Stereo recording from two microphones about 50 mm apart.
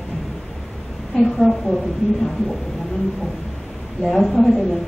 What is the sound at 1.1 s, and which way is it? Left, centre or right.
Speech, centre.